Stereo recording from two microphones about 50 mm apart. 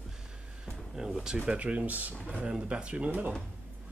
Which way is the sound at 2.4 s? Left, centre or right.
Centre.